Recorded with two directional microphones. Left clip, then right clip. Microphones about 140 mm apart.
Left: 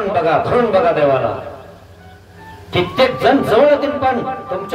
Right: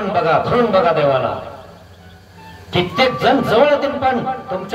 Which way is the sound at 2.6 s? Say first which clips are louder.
Left 1 dB; 20° right (ahead or behind).